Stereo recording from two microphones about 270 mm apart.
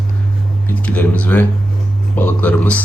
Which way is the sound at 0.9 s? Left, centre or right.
Centre.